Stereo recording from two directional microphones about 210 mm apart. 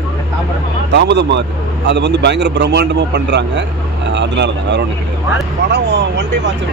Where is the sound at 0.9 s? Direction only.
55° right (ahead or behind).